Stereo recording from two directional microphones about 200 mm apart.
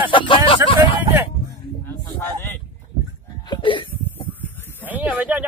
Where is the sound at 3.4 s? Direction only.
25° left (ahead or behind).